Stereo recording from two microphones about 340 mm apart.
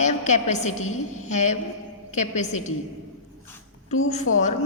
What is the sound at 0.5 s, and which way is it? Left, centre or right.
A woman's voice, left.